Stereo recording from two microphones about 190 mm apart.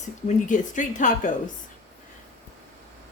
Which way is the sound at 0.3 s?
40° left (ahead or behind).